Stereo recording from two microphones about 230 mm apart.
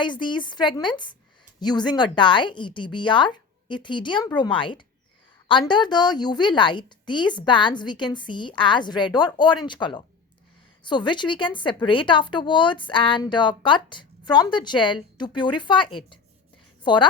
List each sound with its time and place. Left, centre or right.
0.0 s a woman's voice: centre